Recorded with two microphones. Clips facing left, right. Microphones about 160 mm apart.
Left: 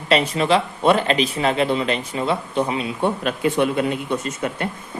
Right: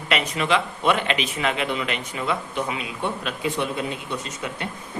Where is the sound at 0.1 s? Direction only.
35° left (ahead or behind).